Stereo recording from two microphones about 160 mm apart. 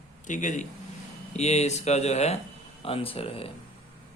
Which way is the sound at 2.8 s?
35° left (ahead or behind).